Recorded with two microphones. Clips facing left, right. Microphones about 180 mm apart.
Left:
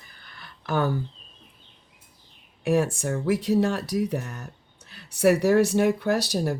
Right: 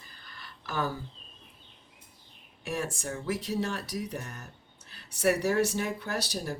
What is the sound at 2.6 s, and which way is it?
Speech, 60° left (ahead or behind).